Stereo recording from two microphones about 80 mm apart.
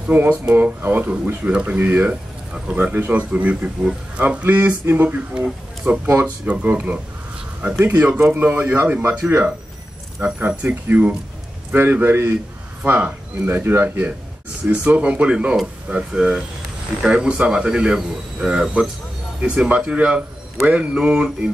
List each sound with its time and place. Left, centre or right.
0.1 s speech: right